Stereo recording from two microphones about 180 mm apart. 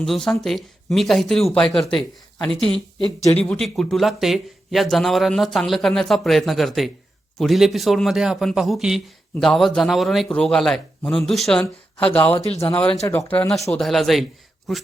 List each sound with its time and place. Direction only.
0.0 s speech: centre (ahead or behind)